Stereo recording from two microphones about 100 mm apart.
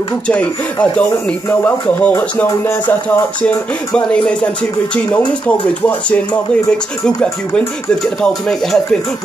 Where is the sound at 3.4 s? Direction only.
10° left (ahead or behind).